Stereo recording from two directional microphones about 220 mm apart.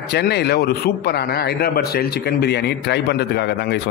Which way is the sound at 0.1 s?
50° left (ahead or behind).